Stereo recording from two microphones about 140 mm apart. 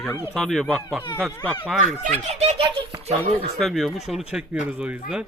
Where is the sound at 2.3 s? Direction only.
50° right (ahead or behind).